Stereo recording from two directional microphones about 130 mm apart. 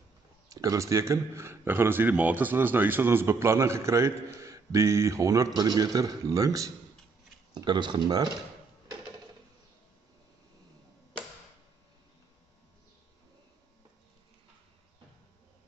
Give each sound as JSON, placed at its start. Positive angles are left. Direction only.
{"t": 0.5, "sound": "a man's voice", "side_deg": -25}